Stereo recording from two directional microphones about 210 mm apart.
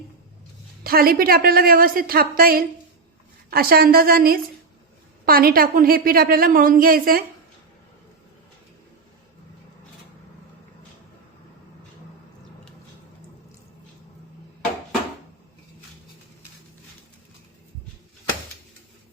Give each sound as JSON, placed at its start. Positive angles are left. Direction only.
{"t": 0.9, "sound": "a woman's voice", "side_deg": -45}